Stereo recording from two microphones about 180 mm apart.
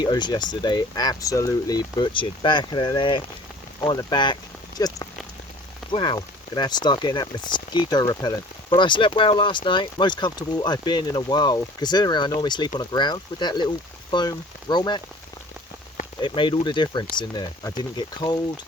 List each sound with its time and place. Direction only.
0.0 s speech: 25° left (ahead or behind)
16.2 s speech: 25° left (ahead or behind)